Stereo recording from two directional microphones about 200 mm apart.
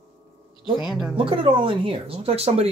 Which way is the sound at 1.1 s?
25° right (ahead or behind).